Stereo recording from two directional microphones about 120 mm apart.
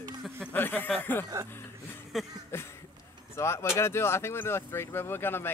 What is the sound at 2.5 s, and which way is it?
Speech, 20° left (ahead or behind).